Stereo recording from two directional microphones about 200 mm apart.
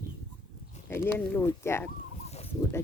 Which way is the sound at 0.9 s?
10° left (ahead or behind).